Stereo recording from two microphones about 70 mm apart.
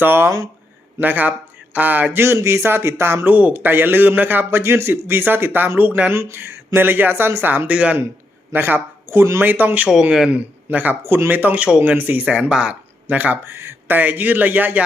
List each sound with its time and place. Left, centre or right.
0.0 s a man's voice: right
2.2 s speech: right
3.2 s a man's voice: right
7.7 s a man's voice: centre
8.5 s speech: right
9.4 s a man's voice: right
10.0 s a man's voice: centre
13.1 s a man's voice: right
13.4 s a man's voice: right